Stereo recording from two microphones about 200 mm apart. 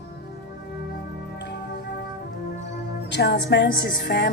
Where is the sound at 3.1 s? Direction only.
55° left (ahead or behind).